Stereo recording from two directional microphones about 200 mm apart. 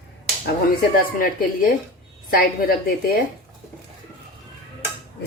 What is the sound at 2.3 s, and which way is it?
Speech, 45° left (ahead or behind).